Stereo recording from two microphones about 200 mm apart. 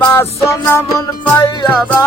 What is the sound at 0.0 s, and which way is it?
Music, 10° left (ahead or behind).